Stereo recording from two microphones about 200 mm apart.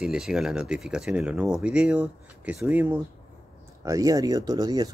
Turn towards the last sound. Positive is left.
turn(degrees=-20)  # may be behind; listen again after turning